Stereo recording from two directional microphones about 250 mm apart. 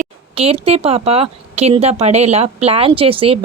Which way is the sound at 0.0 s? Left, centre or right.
Right.